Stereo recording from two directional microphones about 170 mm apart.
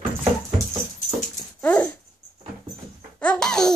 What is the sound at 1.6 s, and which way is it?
Dog, 10° left (ahead or behind).